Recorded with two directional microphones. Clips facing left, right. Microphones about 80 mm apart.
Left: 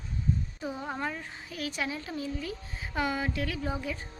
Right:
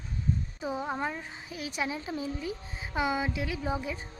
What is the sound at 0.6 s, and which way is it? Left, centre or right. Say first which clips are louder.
Speech: right 2 dB; centre.